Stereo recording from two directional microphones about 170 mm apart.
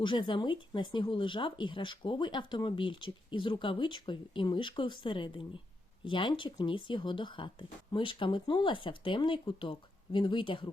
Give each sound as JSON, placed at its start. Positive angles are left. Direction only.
{"t": 0.0, "sound": "speech", "side_deg": 30}